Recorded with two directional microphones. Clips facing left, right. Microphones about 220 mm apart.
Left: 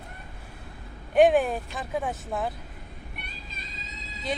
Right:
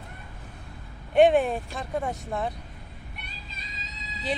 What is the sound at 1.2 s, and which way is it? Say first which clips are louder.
Speech: even; centre (ahead or behind).